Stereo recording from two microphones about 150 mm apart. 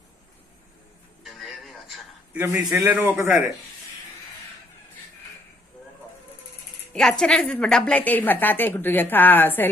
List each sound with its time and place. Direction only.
1.2 s a sound: centre (ahead or behind)
2.4 s a man's voice: 20° right (ahead or behind)
6.9 s a woman's voice: 5° left (ahead or behind)